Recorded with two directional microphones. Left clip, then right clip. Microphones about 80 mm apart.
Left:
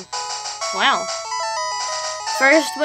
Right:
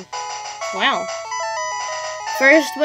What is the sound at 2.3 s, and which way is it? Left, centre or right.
Speech, right.